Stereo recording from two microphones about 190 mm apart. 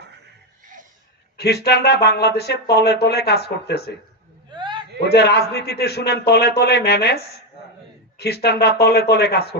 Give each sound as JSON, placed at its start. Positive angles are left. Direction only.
{"t": 1.4, "sound": "speech", "side_deg": 60}
{"t": 4.5, "sound": "a sound", "side_deg": -25}
{"t": 4.9, "sound": "speech", "side_deg": 60}
{"t": 8.2, "sound": "speech", "side_deg": 60}